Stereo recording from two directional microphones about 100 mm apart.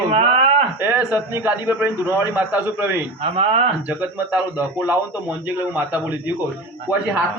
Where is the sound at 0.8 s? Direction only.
20° right (ahead or behind).